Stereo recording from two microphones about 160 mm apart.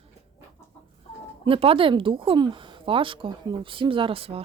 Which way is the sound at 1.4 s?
35° right (ahead or behind).